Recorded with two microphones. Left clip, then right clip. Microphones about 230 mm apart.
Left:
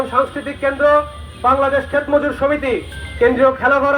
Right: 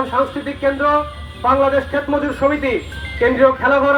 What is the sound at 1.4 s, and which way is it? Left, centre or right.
Speech, left.